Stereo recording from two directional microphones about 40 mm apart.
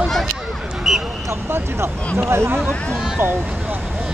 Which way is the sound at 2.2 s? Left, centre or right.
Right.